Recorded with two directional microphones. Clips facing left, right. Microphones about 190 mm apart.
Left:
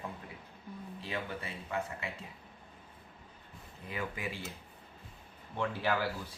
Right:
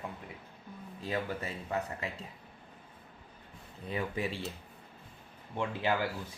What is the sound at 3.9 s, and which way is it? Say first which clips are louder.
Speech: right 4 dB; 30° right (ahead or behind).